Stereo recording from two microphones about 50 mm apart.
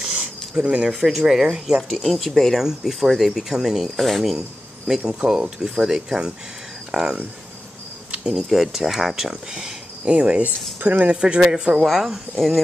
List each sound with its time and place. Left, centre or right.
0.2 s a sound: right
0.8 s speech: centre
2.0 s speech: centre
5.2 s speech: right
5.6 s speech: centre
8.1 s insect: centre
8.5 s speech: centre; by 10.5 s right
10.8 s speech: right
11.1 s speech: centre
11.8 s speech: centre